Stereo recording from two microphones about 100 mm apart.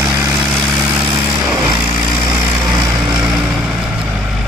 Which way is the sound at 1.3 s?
20° right (ahead or behind).